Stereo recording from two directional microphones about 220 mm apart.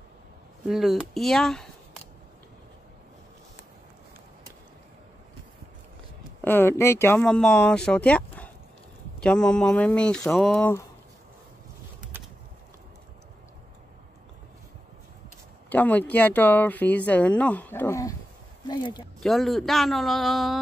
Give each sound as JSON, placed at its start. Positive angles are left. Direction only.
{"t": 0.7, "sound": "speech", "side_deg": 0}
{"t": 6.4, "sound": "speech", "side_deg": 10}
{"t": 15.7, "sound": "speech", "side_deg": 5}
{"t": 19.1, "sound": "speech", "side_deg": 0}